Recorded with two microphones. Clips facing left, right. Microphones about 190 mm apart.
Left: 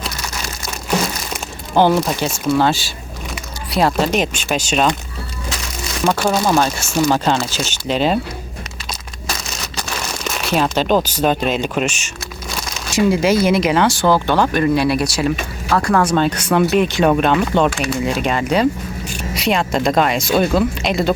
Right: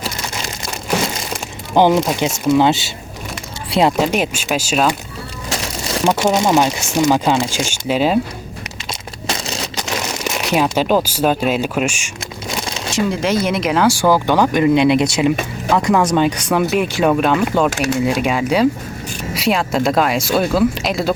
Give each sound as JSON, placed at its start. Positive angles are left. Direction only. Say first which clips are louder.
{"t": 1.7, "sound": "speech", "louder": "right 1 dB", "side_deg": -15}
{"t": 6.1, "sound": "speech", "louder": "right 1 dB", "side_deg": -20}
{"t": 8.9, "sound": "crumpling", "louder": "right 4 dB", "side_deg": -25}
{"t": 12.6, "sound": "a sound", "louder": "right 4 dB", "side_deg": -25}
{"t": 13.1, "sound": "speech", "louder": "left 5 dB", "side_deg": 5}